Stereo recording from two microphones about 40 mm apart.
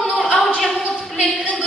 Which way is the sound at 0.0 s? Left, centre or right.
Centre.